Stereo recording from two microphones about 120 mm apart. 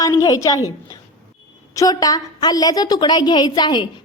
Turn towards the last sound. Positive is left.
turn(degrees=35)  # may be behind; listen again after turning